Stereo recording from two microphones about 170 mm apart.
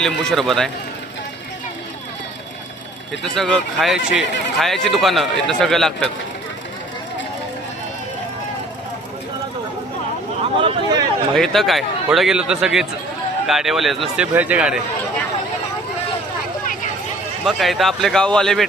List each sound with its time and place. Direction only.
0.0 s speech: centre (ahead or behind)
3.3 s speech: 5° left (ahead or behind)
10.6 s a sound: 25° right (ahead or behind)
11.3 s speech: centre (ahead or behind)
17.4 s speech: centre (ahead or behind)